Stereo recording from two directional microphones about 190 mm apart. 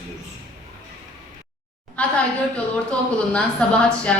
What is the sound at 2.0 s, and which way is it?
A woman's voice, 5° left (ahead or behind).